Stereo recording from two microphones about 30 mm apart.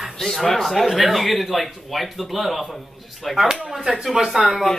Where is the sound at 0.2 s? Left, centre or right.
Centre.